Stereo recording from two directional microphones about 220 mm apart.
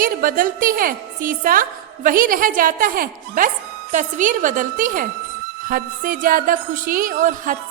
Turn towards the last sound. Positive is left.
turn(degrees=-35)  # may be behind; listen again after turning